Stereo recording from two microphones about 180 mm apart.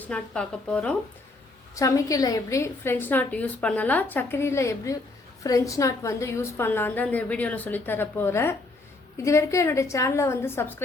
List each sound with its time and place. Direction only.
0.0 s a woman's voice: 5° left (ahead or behind)
1.7 s a woman's voice: 20° left (ahead or behind)